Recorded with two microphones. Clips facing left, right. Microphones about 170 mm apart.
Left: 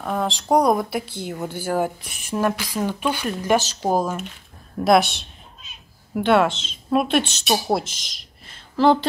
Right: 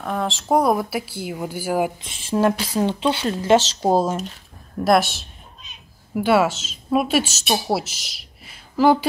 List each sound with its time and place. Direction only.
0.0 s speech: centre (ahead or behind)
2.0 s speech: 25° right (ahead or behind)
4.7 s speech: centre (ahead or behind)